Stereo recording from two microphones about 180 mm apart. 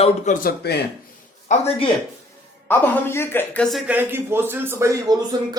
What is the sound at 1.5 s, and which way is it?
Speech, 35° left (ahead or behind).